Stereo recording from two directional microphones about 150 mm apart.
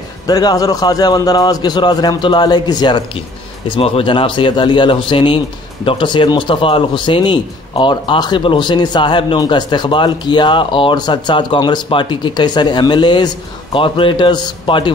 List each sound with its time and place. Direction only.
0.3 s a man's voice: 25° left (ahead or behind)